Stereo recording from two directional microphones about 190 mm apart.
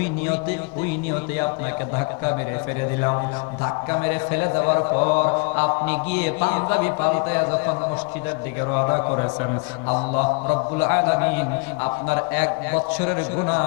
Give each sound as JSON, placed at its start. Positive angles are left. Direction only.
{"t": 3.9, "sound": "a man's voice", "side_deg": 15}
{"t": 4.5, "sound": "mantra", "side_deg": 25}
{"t": 5.8, "sound": "a man's voice", "side_deg": 15}
{"t": 9.9, "sound": "mantra", "side_deg": 35}
{"t": 10.8, "sound": "a man's voice", "side_deg": 20}